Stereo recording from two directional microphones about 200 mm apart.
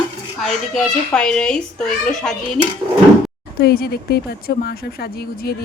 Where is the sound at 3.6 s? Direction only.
55° left (ahead or behind).